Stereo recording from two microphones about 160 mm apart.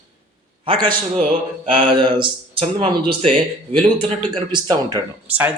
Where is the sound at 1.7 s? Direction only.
30° right (ahead or behind).